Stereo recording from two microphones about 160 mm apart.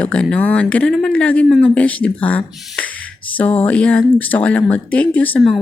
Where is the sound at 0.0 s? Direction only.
5° left (ahead or behind).